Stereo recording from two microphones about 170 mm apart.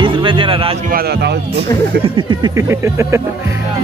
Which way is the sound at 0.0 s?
30° right (ahead or behind).